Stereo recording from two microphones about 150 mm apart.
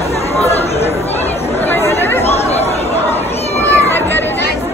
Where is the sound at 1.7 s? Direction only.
15° left (ahead or behind).